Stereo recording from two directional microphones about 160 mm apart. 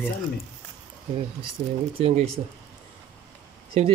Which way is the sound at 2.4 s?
35° right (ahead or behind).